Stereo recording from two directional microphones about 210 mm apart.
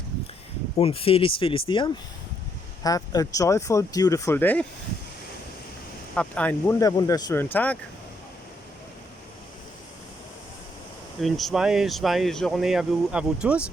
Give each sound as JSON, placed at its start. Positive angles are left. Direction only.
{"t": 0.8, "sound": "speech", "side_deg": 25}
{"t": 6.1, "sound": "speech", "side_deg": 5}
{"t": 11.2, "sound": "speech", "side_deg": 0}